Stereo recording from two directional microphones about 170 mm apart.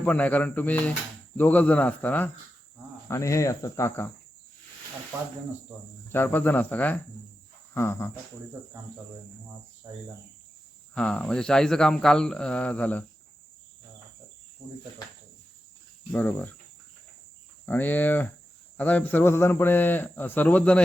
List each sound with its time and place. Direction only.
0.0 s a man's voice: 10° left (ahead or behind)
6.1 s a man's voice: 10° left (ahead or behind)
10.9 s speech: 5° left (ahead or behind)
16.1 s a man's voice: 10° left (ahead or behind)
17.7 s a man's voice: 10° left (ahead or behind)